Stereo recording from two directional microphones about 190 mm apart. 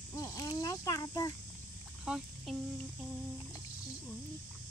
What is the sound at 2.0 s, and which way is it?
Speech, 5° right (ahead or behind).